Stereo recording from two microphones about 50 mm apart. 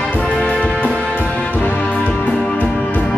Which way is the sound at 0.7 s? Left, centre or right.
Left.